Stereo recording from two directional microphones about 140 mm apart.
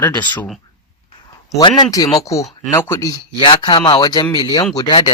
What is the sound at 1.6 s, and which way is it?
Speech, 30° left (ahead or behind).